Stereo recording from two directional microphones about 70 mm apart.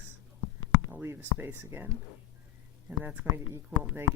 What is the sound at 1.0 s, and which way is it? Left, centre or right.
Speech, right.